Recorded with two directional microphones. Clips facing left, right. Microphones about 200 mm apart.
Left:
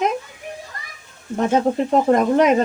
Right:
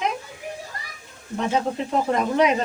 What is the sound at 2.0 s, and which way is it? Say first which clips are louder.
Speech: left 4 dB; 50° left (ahead or behind).